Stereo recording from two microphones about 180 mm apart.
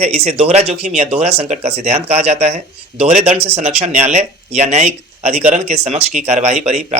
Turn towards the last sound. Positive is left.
turn(degrees=-40)  # may be behind; listen again after turning